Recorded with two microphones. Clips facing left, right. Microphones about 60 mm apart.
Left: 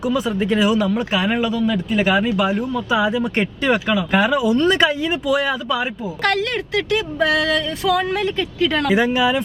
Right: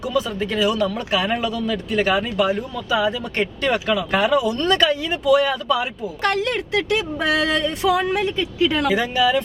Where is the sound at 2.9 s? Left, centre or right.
Left.